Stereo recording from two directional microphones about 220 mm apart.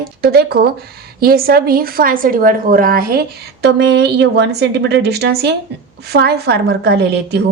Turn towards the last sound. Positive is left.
turn(degrees=-50)  # may be behind; listen again after turning